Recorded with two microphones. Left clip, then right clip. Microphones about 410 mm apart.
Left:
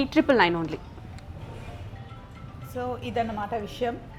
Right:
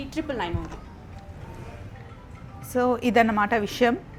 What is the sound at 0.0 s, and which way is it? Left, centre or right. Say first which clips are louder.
Speech: left 9 dB; left.